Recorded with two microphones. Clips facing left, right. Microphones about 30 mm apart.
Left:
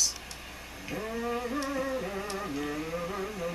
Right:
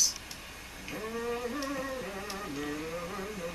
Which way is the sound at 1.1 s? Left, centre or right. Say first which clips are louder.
Left 2 dB; centre.